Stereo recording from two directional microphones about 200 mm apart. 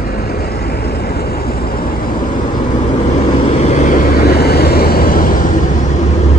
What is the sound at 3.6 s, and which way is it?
Vehicle, 35° left (ahead or behind).